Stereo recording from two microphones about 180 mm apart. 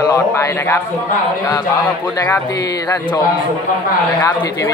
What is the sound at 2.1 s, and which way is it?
Speech, 15° left (ahead or behind).